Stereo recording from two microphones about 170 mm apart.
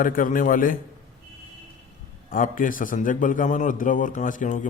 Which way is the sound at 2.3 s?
55° left (ahead or behind).